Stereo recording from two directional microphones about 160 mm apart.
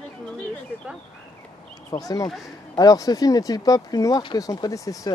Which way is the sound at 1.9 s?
20° left (ahead or behind).